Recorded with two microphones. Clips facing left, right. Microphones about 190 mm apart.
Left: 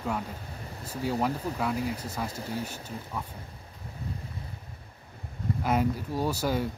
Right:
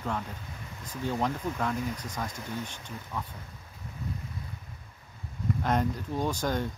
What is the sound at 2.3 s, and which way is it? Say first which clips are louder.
Speech: left 3 dB; 35° left (ahead or behind).